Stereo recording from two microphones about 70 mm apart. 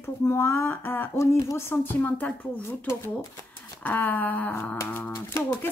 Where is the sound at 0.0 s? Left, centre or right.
Left.